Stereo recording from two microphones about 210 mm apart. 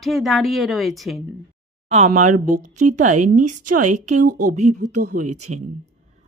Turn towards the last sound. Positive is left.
turn(degrees=-35)  # may be behind; listen again after turning